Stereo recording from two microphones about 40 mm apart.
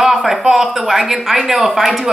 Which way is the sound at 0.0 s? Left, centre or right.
Centre.